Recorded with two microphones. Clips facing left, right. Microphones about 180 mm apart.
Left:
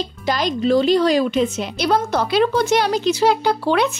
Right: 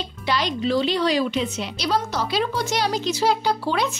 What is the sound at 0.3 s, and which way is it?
A woman's voice, 45° left (ahead or behind).